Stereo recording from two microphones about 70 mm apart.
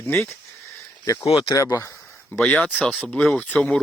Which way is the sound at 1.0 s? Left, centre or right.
Left.